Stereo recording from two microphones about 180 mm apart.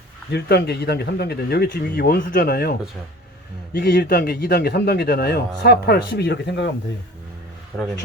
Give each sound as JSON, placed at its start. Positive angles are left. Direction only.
{"t": 0.3, "sound": "a man's voice", "side_deg": 65}
{"t": 7.7, "sound": "a man's voice", "side_deg": -5}